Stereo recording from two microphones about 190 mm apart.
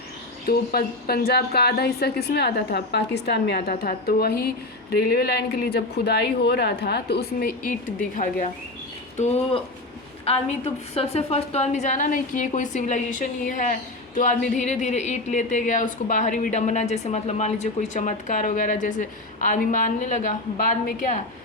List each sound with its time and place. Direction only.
0.4 s a woman's voice: 55° left (ahead or behind)